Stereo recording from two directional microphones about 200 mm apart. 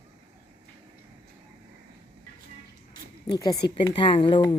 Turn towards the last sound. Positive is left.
turn(degrees=25)  # may be behind; listen again after turning